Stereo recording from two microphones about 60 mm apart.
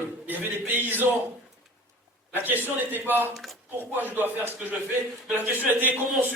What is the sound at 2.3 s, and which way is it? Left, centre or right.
A man's voice, right.